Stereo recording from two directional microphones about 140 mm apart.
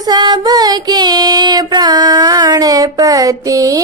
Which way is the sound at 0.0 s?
30° right (ahead or behind).